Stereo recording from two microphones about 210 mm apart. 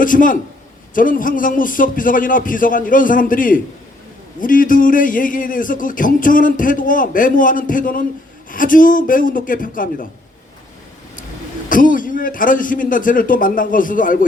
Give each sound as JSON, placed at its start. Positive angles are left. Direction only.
{"t": 0.0, "sound": "a man's voice", "side_deg": 40}
{"t": 11.7, "sound": "a man's voice", "side_deg": 40}